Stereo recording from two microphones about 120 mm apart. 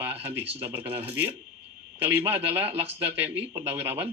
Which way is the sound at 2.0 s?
55° right (ahead or behind).